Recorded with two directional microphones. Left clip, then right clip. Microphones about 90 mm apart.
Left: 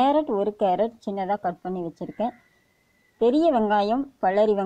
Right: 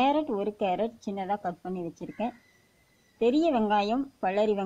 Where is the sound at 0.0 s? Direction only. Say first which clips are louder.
Left 5 dB; 20° left (ahead or behind).